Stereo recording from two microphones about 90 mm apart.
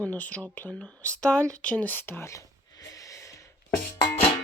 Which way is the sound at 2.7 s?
40° left (ahead or behind).